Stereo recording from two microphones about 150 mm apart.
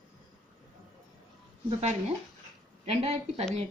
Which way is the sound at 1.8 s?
45° right (ahead or behind).